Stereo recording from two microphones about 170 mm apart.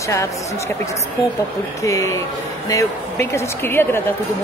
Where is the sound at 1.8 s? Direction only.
20° left (ahead or behind).